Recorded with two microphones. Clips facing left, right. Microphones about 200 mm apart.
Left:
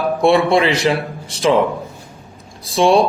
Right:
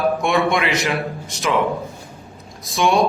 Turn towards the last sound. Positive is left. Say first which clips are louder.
# left 4 dB
turn(degrees=30)  # may be behind; listen again after turning